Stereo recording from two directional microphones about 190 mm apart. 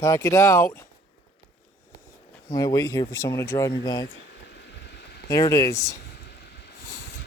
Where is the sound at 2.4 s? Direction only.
20° left (ahead or behind).